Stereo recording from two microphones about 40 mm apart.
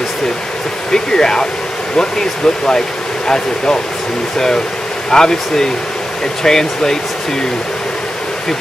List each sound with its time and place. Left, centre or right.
0.9 s speech: centre
5.1 s speech: centre